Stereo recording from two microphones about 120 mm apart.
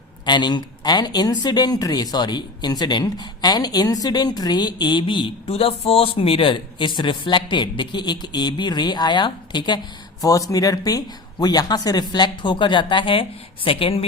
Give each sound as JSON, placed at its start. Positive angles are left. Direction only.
{"t": 0.3, "sound": "a woman's voice", "side_deg": 40}